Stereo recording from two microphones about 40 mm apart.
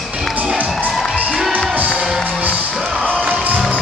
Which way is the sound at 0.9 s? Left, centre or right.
Centre.